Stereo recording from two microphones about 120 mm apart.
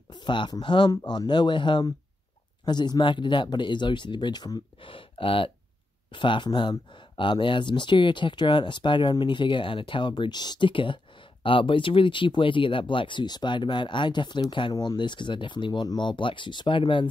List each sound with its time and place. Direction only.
0.1 s speech: 40° left (ahead or behind)